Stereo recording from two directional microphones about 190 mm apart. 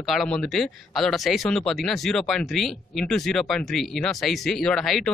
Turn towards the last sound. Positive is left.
turn(degrees=0)  # may be behind; listen again after turning